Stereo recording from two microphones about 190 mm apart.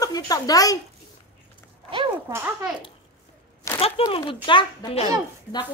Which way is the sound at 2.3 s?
15° right (ahead or behind).